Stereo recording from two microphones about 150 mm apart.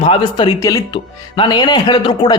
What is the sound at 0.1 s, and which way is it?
Speech, 30° left (ahead or behind).